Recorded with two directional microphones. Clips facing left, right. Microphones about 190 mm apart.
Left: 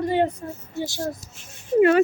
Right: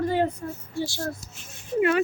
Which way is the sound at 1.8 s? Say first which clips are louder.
Left 6 dB; 35° left (ahead or behind).